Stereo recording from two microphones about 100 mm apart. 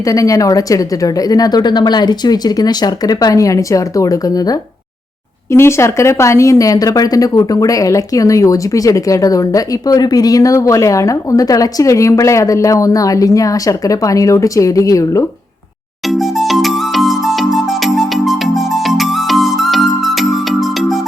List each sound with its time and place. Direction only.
0.0 s a woman's voice: 35° left (ahead or behind)
5.5 s a woman's voice: 25° left (ahead or behind)
16.0 s music: centre (ahead or behind)